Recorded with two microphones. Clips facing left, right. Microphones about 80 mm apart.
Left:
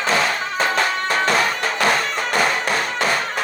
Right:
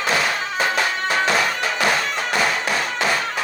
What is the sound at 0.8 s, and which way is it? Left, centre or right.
Music, left.